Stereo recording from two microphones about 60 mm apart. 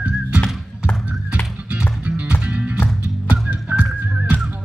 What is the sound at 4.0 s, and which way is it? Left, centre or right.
Music, right.